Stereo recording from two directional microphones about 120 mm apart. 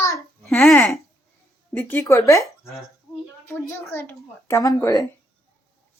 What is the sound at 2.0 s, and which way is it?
Speech, 25° left (ahead or behind).